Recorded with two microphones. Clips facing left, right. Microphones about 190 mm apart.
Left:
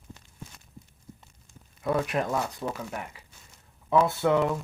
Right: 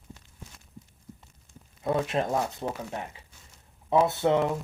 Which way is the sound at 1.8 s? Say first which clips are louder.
Even; 25° right (ahead or behind).